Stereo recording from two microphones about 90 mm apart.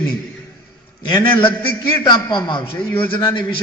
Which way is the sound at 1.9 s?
55° left (ahead or behind).